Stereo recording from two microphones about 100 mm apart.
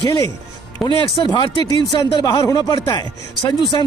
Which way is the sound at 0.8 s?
50° left (ahead or behind).